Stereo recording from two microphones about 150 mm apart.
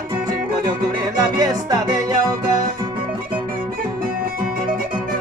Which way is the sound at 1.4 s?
25° right (ahead or behind).